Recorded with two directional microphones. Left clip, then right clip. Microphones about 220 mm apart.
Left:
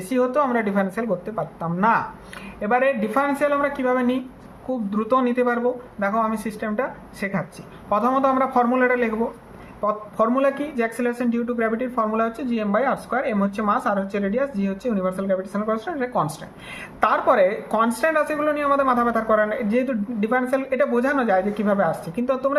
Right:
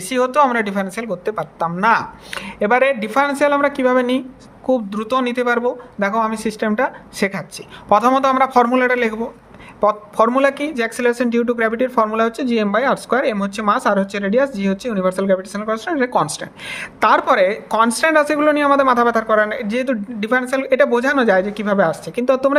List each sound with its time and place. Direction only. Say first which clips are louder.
0.1 s speech: right 5 dB; 50° right (ahead or behind)